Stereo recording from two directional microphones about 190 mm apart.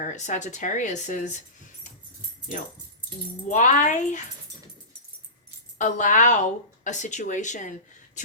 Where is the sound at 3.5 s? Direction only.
40° left (ahead or behind).